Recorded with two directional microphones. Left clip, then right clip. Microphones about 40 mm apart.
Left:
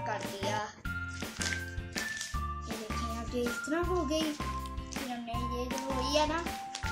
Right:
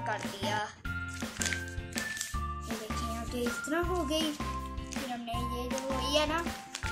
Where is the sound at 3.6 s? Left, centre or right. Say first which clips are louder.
Right 2 dB; right.